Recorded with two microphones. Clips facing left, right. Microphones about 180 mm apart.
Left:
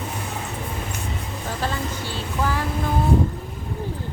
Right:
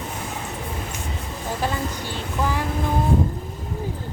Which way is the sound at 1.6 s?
15° right (ahead or behind).